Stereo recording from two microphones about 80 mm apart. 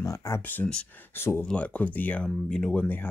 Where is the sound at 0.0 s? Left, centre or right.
Left.